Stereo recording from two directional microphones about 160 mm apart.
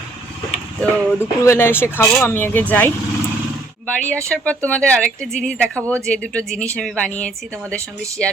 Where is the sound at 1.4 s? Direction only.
15° left (ahead or behind).